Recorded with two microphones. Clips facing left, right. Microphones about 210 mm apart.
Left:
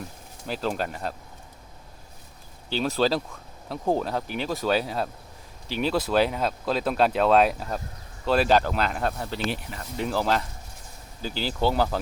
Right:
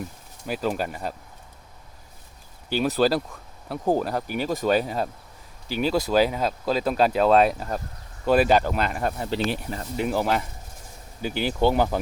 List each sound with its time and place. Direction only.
0.4 s speech: 10° right (ahead or behind)
2.6 s speech: 5° right (ahead or behind)
9.5 s speech: 35° right (ahead or behind)
10.0 s speech: 10° right (ahead or behind)